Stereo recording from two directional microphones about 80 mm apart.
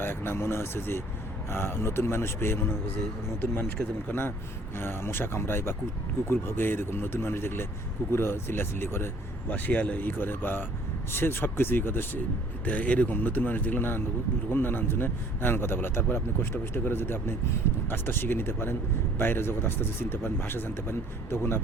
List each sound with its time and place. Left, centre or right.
0.0 s a man's voice: left
9.5 s a man's voice: centre